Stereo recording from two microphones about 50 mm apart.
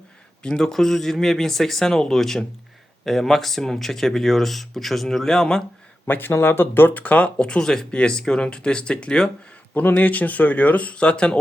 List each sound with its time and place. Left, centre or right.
0.4 s speech: centre
0.7 s speech: centre
6.1 s speech: left
7.3 s speech: centre
9.7 s speech: left